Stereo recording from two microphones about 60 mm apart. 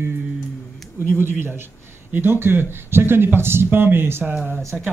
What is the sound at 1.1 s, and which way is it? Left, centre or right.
Speech, right.